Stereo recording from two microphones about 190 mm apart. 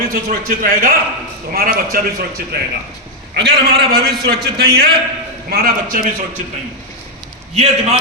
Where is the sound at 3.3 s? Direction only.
60° right (ahead or behind).